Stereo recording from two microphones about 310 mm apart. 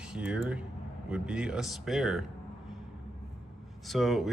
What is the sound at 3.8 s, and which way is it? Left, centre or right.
Speech, centre.